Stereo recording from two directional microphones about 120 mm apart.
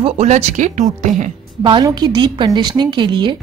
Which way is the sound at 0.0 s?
60° right (ahead or behind).